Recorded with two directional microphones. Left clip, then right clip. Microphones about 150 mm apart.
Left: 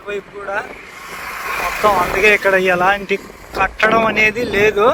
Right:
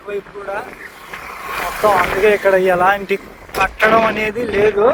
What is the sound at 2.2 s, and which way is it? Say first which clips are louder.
Speech: left 1 dB; 20° right (ahead or behind).